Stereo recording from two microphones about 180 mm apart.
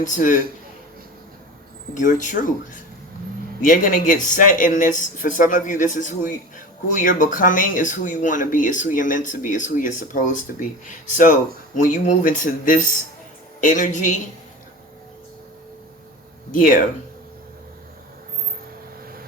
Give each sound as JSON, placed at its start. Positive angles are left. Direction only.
{"t": 0.0, "sound": "speech", "side_deg": 45}
{"t": 2.0, "sound": "speech", "side_deg": 45}
{"t": 3.6, "sound": "speech", "side_deg": 50}
{"t": 16.5, "sound": "speech", "side_deg": 50}